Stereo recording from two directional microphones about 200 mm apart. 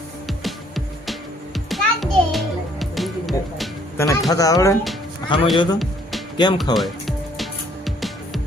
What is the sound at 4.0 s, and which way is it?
Speech, 15° left (ahead or behind).